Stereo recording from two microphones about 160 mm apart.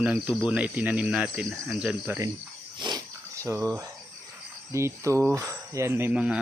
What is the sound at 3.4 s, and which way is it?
Speech, 20° right (ahead or behind).